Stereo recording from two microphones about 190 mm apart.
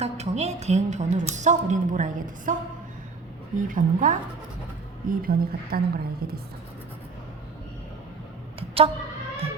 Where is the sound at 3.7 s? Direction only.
45° right (ahead or behind).